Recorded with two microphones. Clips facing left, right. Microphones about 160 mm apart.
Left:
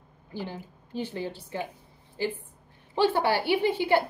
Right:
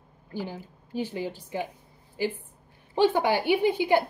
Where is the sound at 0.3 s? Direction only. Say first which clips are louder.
Right 2 dB; 10° right (ahead or behind).